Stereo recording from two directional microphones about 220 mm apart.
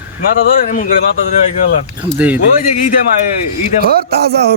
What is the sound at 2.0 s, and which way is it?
Speech, 5° right (ahead or behind).